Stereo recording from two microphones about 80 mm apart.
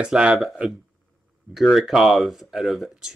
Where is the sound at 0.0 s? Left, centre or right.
Centre.